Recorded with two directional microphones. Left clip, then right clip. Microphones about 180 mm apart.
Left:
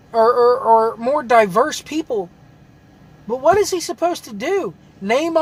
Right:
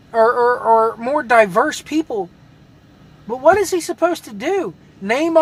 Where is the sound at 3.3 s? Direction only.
5° right (ahead or behind).